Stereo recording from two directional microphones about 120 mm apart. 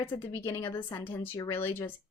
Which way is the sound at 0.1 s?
25° left (ahead or behind).